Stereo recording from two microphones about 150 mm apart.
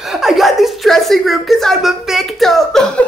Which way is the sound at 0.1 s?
Centre (ahead or behind).